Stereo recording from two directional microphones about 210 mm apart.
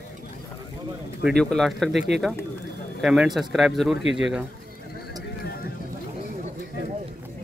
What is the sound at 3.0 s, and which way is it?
Speech, centre (ahead or behind).